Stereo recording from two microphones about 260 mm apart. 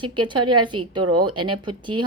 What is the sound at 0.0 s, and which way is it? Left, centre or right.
Speech, centre.